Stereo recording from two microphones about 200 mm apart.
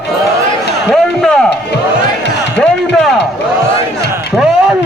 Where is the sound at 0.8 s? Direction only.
Centre (ahead or behind).